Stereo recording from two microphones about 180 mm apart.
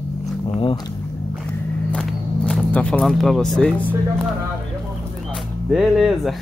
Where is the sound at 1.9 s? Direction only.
5° left (ahead or behind).